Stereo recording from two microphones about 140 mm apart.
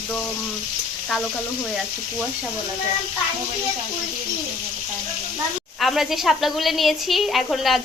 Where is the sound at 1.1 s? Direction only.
Centre (ahead or behind).